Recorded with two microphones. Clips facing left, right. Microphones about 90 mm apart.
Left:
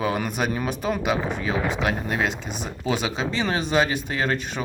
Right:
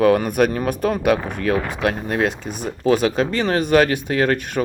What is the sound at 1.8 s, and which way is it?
Speech, 50° right (ahead or behind).